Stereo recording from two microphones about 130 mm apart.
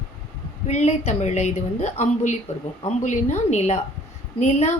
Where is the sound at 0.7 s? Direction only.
60° left (ahead or behind).